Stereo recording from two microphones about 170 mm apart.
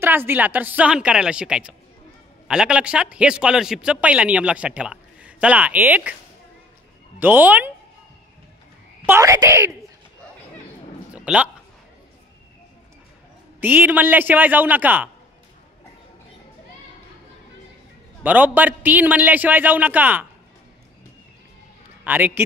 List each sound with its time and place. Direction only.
0.0 s a man's voice: 10° right (ahead or behind)
7.2 s a man's voice: 10° right (ahead or behind)
9.0 s a man's voice: 15° right (ahead or behind)
11.1 s a sound: 5° right (ahead or behind)
13.6 s a man's voice: 10° right (ahead or behind)
18.2 s a man's voice: 10° right (ahead or behind)
22.0 s a man's voice: 10° right (ahead or behind)